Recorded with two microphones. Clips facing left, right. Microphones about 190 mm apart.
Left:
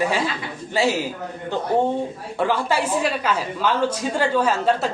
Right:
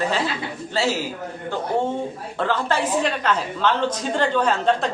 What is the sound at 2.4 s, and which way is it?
A woman's voice, 10° left (ahead or behind).